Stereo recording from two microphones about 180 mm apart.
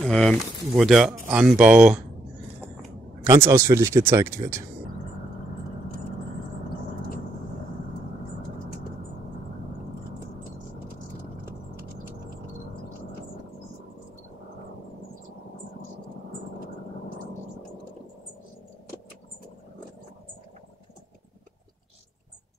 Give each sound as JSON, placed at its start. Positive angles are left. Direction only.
{"t": 0.0, "sound": "speech", "side_deg": 5}
{"t": 3.3, "sound": "speech", "side_deg": -15}